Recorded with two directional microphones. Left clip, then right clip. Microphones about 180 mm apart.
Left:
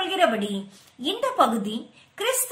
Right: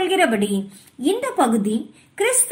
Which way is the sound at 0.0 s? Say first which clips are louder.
Right 4 dB; 20° right (ahead or behind).